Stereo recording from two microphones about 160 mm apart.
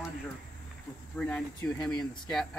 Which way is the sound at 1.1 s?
5° left (ahead or behind).